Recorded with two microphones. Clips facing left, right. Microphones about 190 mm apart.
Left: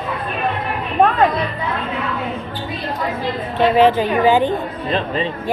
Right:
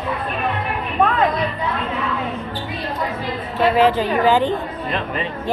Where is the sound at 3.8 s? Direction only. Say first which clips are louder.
Left 3 dB; 20° left (ahead or behind).